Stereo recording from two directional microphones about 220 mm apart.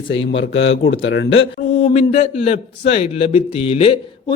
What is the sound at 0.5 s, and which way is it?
Speech, 60° left (ahead or behind).